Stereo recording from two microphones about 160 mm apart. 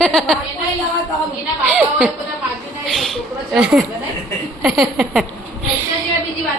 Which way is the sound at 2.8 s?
Centre (ahead or behind).